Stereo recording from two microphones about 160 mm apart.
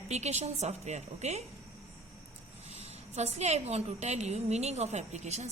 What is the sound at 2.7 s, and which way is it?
A woman's voice, 45° right (ahead or behind).